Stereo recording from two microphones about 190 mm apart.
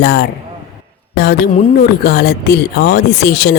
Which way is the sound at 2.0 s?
60° left (ahead or behind).